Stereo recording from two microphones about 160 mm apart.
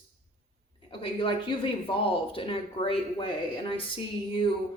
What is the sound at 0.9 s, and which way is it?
Speech, 30° left (ahead or behind).